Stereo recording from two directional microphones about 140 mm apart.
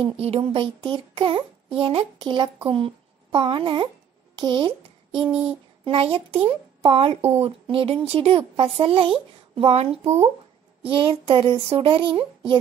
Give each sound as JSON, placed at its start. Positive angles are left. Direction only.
{"t": 0.0, "sound": "child singing", "side_deg": -45}
{"t": 4.4, "sound": "speech", "side_deg": -35}
{"t": 5.9, "sound": "child singing", "side_deg": -40}